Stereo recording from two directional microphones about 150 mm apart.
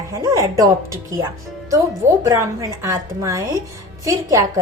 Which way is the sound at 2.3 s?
20° right (ahead or behind).